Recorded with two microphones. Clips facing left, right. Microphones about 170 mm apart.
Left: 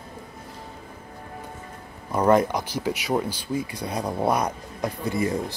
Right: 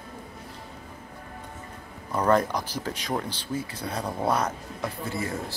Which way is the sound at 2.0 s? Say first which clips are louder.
Left 3 dB; 10° left (ahead or behind).